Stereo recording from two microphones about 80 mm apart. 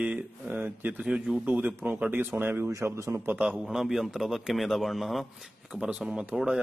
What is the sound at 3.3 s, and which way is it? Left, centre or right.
Speech, centre.